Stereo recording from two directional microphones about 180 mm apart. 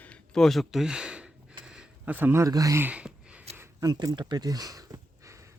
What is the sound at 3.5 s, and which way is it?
Speech, 15° right (ahead or behind).